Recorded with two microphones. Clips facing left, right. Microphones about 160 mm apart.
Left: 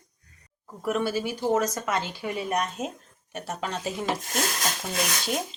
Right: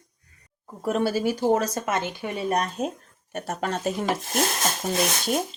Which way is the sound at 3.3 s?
50° right (ahead or behind).